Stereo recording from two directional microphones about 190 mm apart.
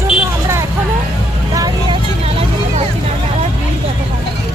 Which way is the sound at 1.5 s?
20° right (ahead or behind).